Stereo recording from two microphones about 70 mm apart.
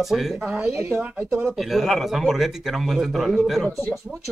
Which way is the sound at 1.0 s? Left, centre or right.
Centre.